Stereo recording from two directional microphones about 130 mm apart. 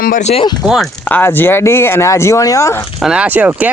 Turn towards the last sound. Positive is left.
turn(degrees=-10)  # may be behind; listen again after turning